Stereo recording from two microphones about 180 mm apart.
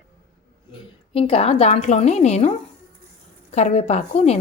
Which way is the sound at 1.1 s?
30° left (ahead or behind).